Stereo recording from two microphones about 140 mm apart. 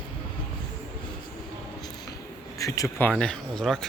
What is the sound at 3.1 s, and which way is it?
Speech, 5° left (ahead or behind).